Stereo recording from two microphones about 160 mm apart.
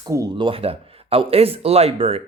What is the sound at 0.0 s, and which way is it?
Speech, 25° right (ahead or behind).